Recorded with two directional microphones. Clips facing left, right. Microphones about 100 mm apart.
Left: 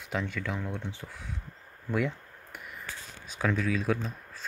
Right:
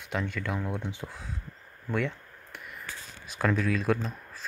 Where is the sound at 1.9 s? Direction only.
5° left (ahead or behind).